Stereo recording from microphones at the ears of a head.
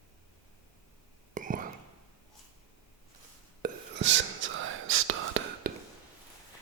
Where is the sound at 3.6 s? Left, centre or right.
Right.